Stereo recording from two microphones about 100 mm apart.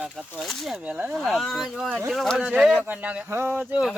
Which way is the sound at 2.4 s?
10° right (ahead or behind).